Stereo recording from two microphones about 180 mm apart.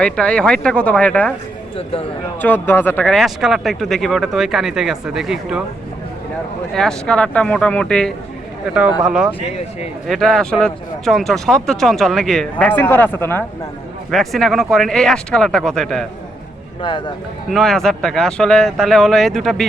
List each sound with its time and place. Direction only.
0.0 s speech: 5° left (ahead or behind)
1.7 s speech: 30° left (ahead or behind)
2.4 s speech: 10° left (ahead or behind)
6.7 s speech: 5° left (ahead or behind)
14.1 s speech: centre (ahead or behind)
17.5 s speech: centre (ahead or behind)